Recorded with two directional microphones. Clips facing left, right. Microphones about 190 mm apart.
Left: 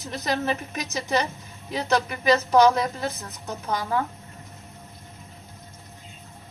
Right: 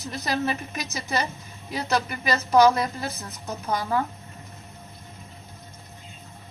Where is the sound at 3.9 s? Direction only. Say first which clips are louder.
Even; centre (ahead or behind).